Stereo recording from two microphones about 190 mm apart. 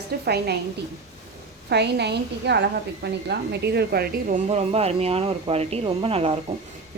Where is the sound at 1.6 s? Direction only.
60° right (ahead or behind).